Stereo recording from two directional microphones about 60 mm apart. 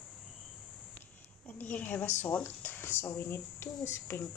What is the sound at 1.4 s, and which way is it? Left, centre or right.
A woman's voice, left.